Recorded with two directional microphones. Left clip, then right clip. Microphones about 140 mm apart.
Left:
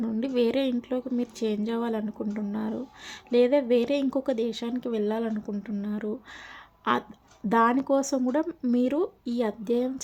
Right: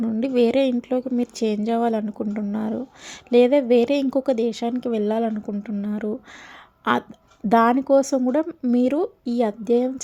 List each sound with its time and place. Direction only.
0.0 s a woman's voice: 25° right (ahead or behind)
7.4 s a woman's voice: 30° right (ahead or behind)